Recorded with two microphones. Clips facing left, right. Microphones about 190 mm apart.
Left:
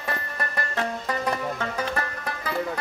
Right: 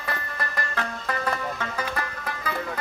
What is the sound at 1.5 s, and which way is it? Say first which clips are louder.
Music: left 2 dB; 30° left (ahead or behind).